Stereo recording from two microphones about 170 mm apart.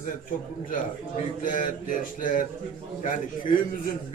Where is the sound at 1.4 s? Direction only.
50° left (ahead or behind).